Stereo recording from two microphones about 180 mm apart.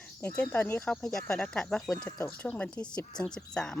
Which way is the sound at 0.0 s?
5° left (ahead or behind).